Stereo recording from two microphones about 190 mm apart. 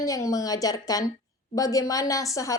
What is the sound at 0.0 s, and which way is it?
A woman's voice, 15° left (ahead or behind).